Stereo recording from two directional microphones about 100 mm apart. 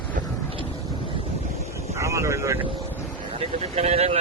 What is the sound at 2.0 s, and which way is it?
Vehicle, 30° right (ahead or behind).